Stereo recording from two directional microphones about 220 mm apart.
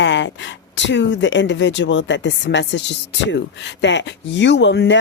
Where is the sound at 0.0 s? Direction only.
55° left (ahead or behind).